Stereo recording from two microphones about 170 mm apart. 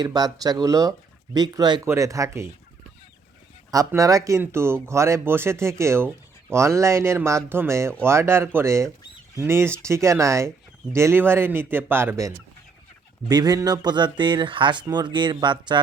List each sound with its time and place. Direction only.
0.0 s speech: 25° right (ahead or behind)
3.7 s speech: 20° right (ahead or behind)